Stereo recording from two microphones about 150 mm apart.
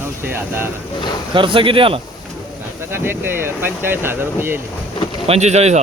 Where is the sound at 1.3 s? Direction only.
35° right (ahead or behind).